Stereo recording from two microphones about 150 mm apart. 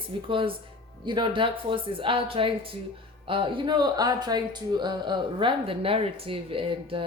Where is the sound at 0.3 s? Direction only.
35° right (ahead or behind).